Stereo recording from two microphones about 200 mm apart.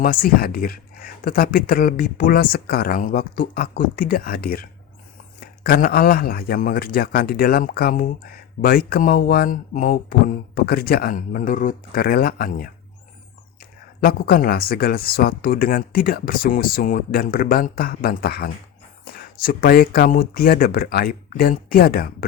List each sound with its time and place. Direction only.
0.0 s a man's voice: 45° left (ahead or behind)
14.0 s a man's voice: 50° left (ahead or behind)